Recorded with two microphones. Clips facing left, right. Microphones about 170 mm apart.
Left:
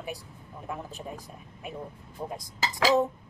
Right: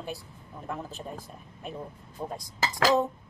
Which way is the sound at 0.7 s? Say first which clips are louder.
Right 1 dB; 5° left (ahead or behind).